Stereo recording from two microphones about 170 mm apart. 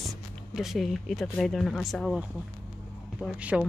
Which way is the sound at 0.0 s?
Centre (ahead or behind).